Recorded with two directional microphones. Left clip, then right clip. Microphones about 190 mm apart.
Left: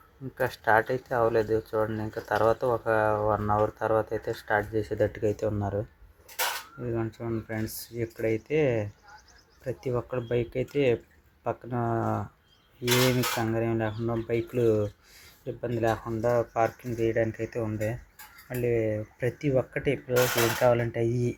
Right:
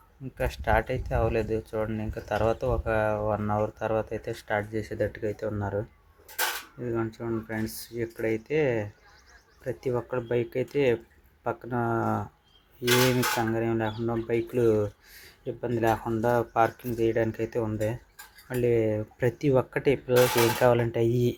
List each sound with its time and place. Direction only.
0.3 s speech: 5° right (ahead or behind)
5.2 s speech: 10° left (ahead or behind)
5.5 s speech: centre (ahead or behind)
6.8 s speech: centre (ahead or behind)